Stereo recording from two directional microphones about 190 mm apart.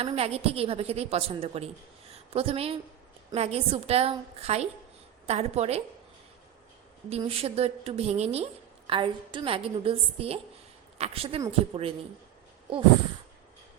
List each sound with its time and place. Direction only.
0.0 s a woman's voice: 30° right (ahead or behind)
7.2 s a woman's voice: 30° right (ahead or behind)